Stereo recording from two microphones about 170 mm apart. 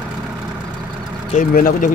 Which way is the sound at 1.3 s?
55° left (ahead or behind).